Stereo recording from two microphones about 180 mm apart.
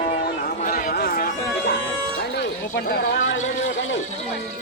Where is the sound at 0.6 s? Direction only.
50° left (ahead or behind).